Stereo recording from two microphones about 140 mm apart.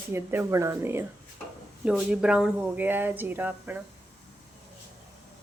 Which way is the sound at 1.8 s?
5° right (ahead or behind).